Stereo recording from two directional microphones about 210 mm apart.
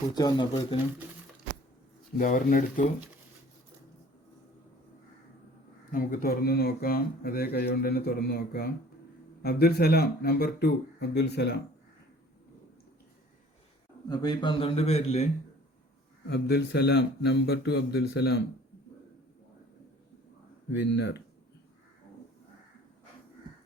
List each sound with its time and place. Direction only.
0.1 s a man's voice: 20° left (ahead or behind)
2.1 s speech: 40° left (ahead or behind)
5.9 s speech: 40° left (ahead or behind)
14.1 s a man's voice: 20° left (ahead or behind)
16.2 s speech: 50° left (ahead or behind)
20.7 s speech: 55° left (ahead or behind)